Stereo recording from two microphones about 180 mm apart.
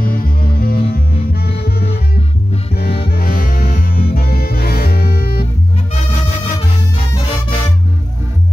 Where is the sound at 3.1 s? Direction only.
55° left (ahead or behind).